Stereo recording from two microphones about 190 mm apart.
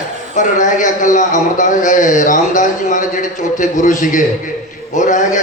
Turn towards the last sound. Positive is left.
turn(degrees=40)  # may be behind; listen again after turning